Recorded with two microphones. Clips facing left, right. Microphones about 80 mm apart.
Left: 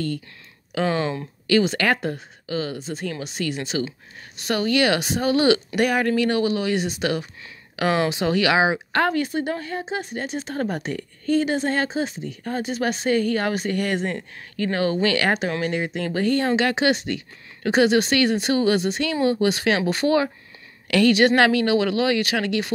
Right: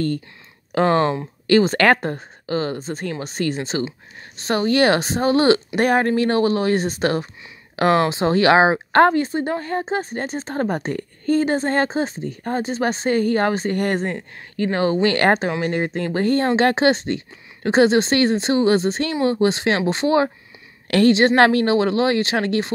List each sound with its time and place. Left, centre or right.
0.7 s speech: right
14.1 s speech: right
15.1 s speech: right
15.4 s speech: right